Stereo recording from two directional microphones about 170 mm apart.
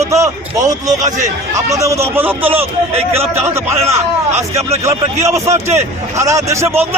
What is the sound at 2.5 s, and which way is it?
A man's voice, 35° right (ahead or behind).